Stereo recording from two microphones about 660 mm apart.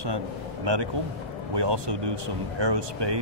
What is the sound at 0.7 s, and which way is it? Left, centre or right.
Speech, right.